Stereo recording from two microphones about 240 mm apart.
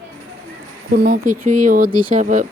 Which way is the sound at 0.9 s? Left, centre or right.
Right.